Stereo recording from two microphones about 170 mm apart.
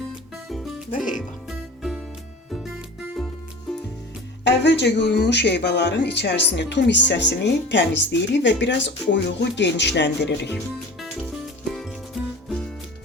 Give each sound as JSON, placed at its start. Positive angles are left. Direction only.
{"t": 0.4, "sound": "music", "side_deg": 0}
{"t": 0.9, "sound": "music", "side_deg": 50}
{"t": 1.5, "sound": "music", "side_deg": 0}
{"t": 3.2, "sound": "music", "side_deg": 0}
{"t": 4.4, "sound": "speech", "side_deg": 90}
{"t": 11.7, "sound": "music", "side_deg": 0}